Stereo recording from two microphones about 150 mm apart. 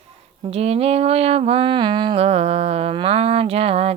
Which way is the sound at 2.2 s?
45° right (ahead or behind).